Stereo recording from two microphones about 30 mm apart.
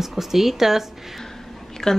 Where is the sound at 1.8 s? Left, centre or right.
Centre.